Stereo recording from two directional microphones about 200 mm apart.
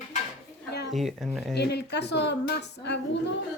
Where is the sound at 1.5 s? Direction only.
55° left (ahead or behind).